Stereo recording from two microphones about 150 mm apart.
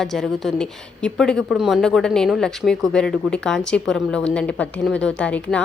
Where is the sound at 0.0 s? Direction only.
Centre (ahead or behind).